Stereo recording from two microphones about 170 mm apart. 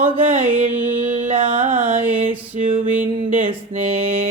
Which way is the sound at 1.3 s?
35° right (ahead or behind).